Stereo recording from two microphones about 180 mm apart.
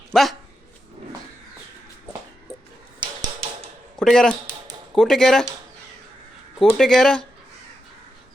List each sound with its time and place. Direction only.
0.1 s speech: centre (ahead or behind)
3.0 s a sound: 30° right (ahead or behind)
3.9 s speech: 5° left (ahead or behind)
6.6 s speech: centre (ahead or behind)